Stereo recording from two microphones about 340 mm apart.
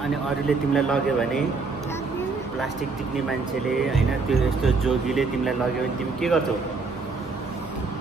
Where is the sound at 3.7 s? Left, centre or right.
Centre.